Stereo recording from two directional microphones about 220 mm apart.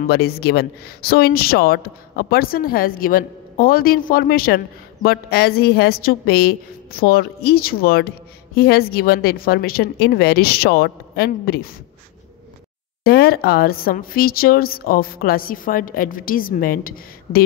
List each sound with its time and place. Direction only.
0.1 s a woman's voice: 45° left (ahead or behind)
13.0 s speech: 45° left (ahead or behind)